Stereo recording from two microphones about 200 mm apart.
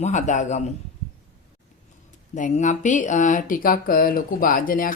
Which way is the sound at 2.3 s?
40° left (ahead or behind).